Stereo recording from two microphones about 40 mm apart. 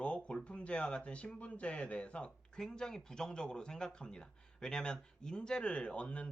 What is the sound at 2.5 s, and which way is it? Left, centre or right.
Speech, centre.